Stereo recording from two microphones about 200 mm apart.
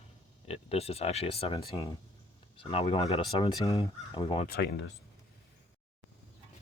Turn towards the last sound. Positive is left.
turn(degrees=60)  # may be behind; listen again after turning